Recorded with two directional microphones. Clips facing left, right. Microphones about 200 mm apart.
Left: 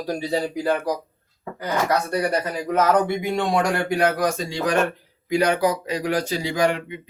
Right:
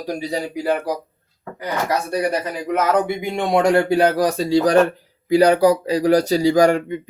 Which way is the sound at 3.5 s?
25° right (ahead or behind).